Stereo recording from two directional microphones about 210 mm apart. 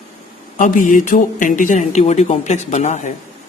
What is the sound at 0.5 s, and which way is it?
Speech, 40° left (ahead or behind).